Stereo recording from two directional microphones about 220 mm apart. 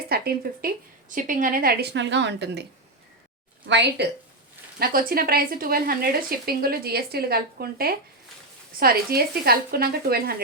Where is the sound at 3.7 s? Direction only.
50° right (ahead or behind).